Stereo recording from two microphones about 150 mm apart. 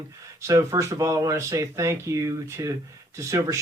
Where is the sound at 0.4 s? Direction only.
20° right (ahead or behind).